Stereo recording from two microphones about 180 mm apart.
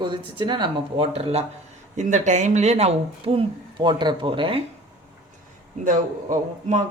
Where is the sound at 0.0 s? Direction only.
25° right (ahead or behind).